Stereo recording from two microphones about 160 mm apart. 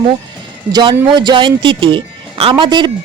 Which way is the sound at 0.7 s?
25° right (ahead or behind).